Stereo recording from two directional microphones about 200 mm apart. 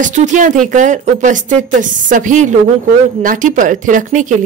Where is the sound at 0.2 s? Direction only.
40° right (ahead or behind).